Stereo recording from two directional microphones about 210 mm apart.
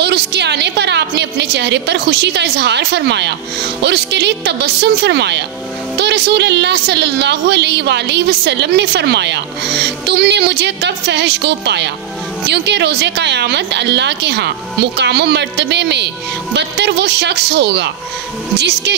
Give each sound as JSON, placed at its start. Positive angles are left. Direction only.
{"t": 0.0, "sound": "a woman's voice", "side_deg": -55}